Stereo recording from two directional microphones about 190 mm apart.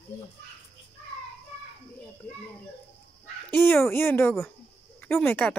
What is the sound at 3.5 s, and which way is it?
Speech, 10° left (ahead or behind).